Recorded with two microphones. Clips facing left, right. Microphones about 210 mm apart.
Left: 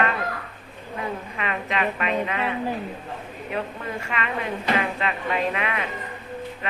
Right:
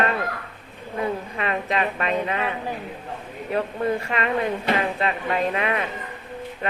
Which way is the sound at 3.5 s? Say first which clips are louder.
Right 7 dB; 40° right (ahead or behind).